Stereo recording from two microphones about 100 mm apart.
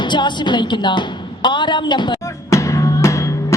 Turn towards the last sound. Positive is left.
turn(degrees=30)  # may be behind; listen again after turning